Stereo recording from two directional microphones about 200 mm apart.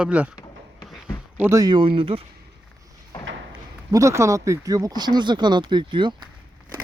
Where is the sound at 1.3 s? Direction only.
10° right (ahead or behind).